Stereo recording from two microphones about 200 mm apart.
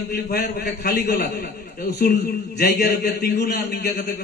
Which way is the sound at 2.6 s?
45° left (ahead or behind).